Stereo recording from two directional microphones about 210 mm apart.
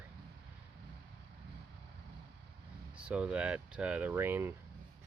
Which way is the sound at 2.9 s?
5° right (ahead or behind).